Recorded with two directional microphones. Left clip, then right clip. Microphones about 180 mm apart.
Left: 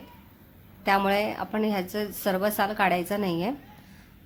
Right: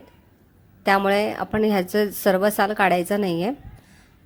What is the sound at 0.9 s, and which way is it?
Speech, 30° right (ahead or behind).